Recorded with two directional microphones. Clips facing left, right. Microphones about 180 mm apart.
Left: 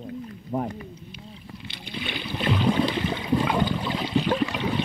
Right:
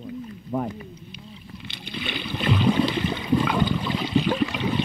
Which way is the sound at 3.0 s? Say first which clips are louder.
Right 1 dB; 20° left (ahead or behind).